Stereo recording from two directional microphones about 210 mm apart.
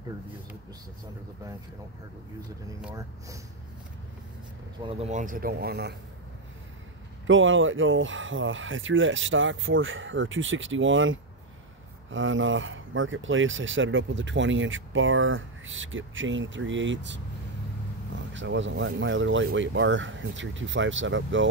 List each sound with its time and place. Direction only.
4.8 s speech: 30° right (ahead or behind); by 5.9 s 50° right (ahead or behind)
7.2 s speech: 65° right (ahead or behind)